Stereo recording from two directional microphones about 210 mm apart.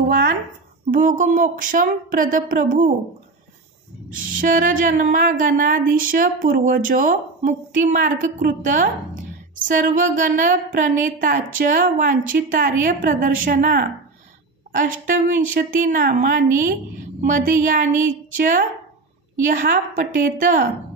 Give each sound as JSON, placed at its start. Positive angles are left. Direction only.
{"t": 0.1, "sound": "a woman's voice", "side_deg": -45}
{"t": 4.1, "sound": "a woman's voice", "side_deg": -40}